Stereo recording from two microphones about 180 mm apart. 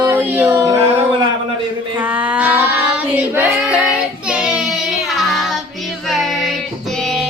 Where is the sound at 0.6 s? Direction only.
25° right (ahead or behind).